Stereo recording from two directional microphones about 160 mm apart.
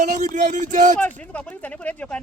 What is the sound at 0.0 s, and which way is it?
Speech, 50° right (ahead or behind).